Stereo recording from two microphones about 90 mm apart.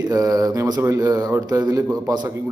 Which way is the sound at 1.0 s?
45° right (ahead or behind).